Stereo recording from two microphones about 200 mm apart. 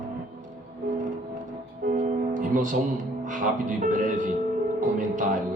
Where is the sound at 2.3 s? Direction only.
40° right (ahead or behind).